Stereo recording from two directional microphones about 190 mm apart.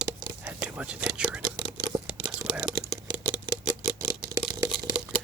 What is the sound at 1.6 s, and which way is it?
Whispering, 20° right (ahead or behind).